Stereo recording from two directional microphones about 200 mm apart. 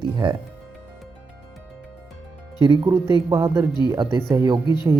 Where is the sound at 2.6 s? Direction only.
20° right (ahead or behind).